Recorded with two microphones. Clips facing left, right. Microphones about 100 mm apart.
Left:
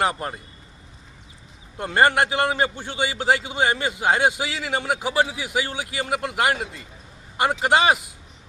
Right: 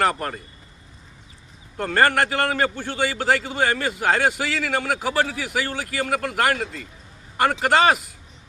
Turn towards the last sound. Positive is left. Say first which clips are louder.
# right 1 dB
turn(degrees=15)  # may be behind; listen again after turning